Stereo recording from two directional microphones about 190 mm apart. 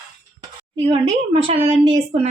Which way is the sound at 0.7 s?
30° right (ahead or behind).